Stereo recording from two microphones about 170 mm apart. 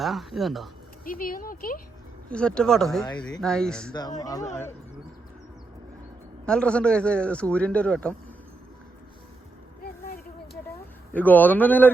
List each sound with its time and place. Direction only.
0.0 s speech: centre (ahead or behind)
1.0 s speech: 55° left (ahead or behind)
2.3 s speech: 5° left (ahead or behind)
4.2 s speech: 20° left (ahead or behind)
6.4 s a man's voice: 5° left (ahead or behind)
9.8 s a sound: 60° left (ahead or behind)
11.1 s a man's voice: 10° left (ahead or behind)